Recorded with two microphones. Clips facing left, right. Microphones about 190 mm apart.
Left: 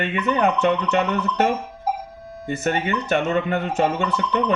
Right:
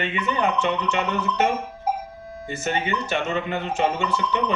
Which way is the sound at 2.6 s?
55° left (ahead or behind).